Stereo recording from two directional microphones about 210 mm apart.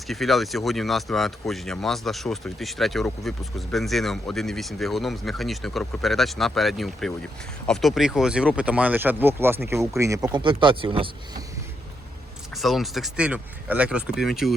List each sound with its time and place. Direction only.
0.1 s speech: centre (ahead or behind); by 11.4 s 25° right (ahead or behind)
12.5 s speech: centre (ahead or behind)